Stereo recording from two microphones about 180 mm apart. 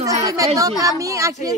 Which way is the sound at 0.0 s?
20° right (ahead or behind).